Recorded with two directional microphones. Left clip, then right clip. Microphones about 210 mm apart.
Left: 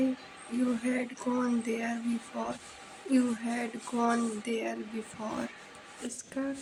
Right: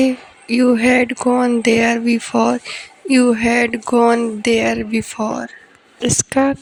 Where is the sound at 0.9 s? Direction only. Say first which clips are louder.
Right 19 dB; 40° right (ahead or behind).